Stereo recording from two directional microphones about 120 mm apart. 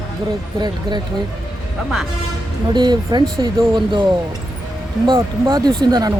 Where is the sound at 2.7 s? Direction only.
35° right (ahead or behind).